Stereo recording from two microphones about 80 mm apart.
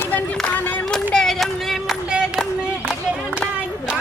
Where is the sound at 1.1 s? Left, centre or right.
Centre.